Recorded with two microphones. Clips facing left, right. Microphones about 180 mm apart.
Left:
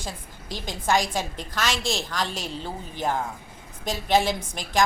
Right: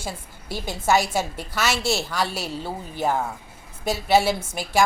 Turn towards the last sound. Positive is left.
turn(degrees=-10)  # may be behind; listen again after turning